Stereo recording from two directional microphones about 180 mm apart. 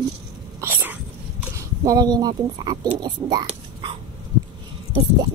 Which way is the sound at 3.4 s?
30° right (ahead or behind).